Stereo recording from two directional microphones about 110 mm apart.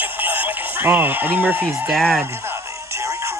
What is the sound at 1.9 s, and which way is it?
Speech, 5° left (ahead or behind).